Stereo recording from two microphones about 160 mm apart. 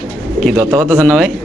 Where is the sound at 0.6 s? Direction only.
20° right (ahead or behind).